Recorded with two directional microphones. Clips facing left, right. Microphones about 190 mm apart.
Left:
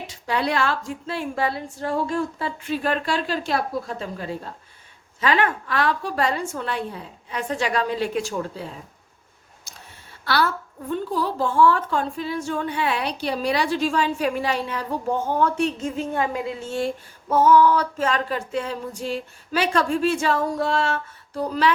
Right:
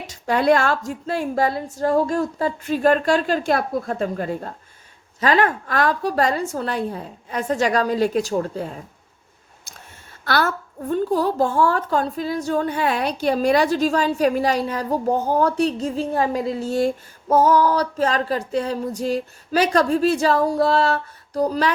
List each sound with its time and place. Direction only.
0.1 s a woman's voice: 45° right (ahead or behind)
10.2 s a woman's voice: 45° right (ahead or behind)